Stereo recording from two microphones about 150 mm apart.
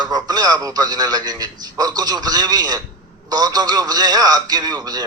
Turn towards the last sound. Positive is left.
turn(degrees=-25)  # may be behind; listen again after turning